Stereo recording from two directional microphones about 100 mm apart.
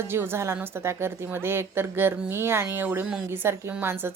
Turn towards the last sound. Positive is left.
turn(degrees=-20)  # may be behind; listen again after turning